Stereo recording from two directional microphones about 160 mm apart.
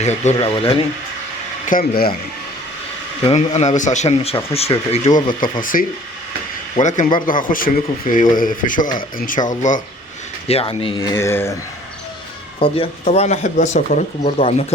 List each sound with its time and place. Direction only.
0.0 s speech: 45° left (ahead or behind)
0.3 s speech: 30° left (ahead or behind)
1.6 s speech: 60° left (ahead or behind)
3.2 s speech: 45° left (ahead or behind)
10.5 s speech: 35° left (ahead or behind)
11.2 s speech: 15° left (ahead or behind)
12.5 s speech: 35° left (ahead or behind)